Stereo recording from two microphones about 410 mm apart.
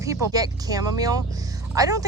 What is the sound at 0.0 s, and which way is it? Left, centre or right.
Speech, centre.